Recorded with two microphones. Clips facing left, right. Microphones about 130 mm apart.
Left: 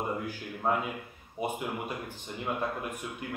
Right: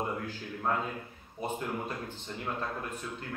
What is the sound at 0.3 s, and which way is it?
A man's voice, 15° left (ahead or behind).